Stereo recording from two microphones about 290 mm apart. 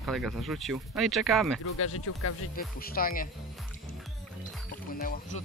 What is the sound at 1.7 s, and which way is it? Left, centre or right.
Speech, left.